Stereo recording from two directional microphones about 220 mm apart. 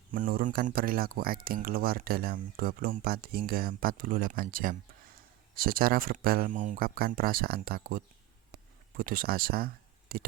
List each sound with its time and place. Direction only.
0.1 s speech: 40° right (ahead or behind)